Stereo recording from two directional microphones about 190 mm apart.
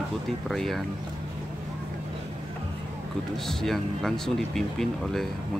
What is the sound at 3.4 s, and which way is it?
Speech, centre (ahead or behind).